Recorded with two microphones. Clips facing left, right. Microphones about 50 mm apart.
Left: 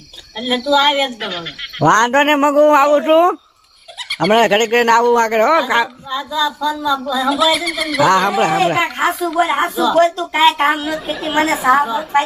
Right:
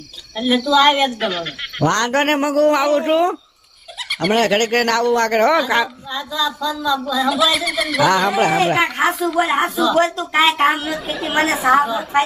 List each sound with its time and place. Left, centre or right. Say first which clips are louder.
0.3 s a woman's voice: even; centre
1.9 s a man's voice: left 6 dB; left; by 11.9 s centre